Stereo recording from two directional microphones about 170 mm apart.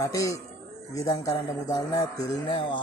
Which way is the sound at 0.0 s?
20° left (ahead or behind).